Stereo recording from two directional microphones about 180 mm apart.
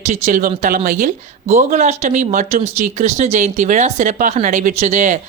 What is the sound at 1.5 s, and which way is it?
Speech, 40° right (ahead or behind).